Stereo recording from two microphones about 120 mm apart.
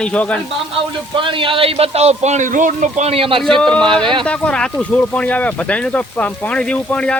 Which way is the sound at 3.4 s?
5° left (ahead or behind).